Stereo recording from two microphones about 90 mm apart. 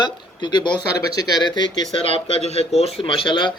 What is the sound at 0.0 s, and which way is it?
Speech, 55° left (ahead or behind).